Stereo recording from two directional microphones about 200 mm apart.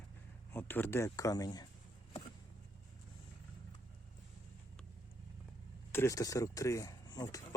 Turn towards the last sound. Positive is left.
turn(degrees=20)  # may be behind; listen again after turning